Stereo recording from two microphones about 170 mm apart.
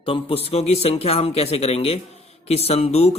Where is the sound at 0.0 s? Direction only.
35° left (ahead or behind).